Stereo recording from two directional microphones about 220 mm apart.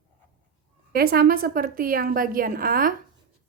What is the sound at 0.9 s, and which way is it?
A woman's voice, 45° right (ahead or behind).